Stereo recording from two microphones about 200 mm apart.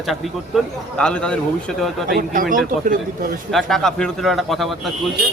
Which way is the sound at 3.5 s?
Centre (ahead or behind).